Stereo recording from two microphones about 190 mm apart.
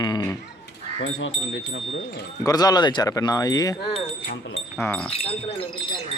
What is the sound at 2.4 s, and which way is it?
Speech, 20° left (ahead or behind).